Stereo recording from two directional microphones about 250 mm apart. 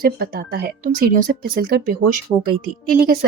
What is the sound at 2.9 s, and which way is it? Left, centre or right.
Speech, right.